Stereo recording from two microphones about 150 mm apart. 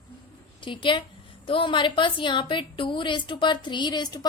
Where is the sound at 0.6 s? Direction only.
35° left (ahead or behind).